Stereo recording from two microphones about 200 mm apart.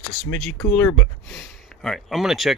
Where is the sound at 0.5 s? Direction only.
15° left (ahead or behind).